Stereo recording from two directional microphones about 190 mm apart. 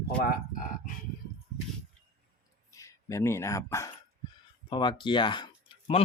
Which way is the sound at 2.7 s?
15° left (ahead or behind).